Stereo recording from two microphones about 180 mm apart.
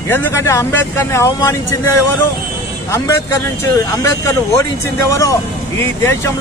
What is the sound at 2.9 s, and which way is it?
A man's voice, 15° left (ahead or behind).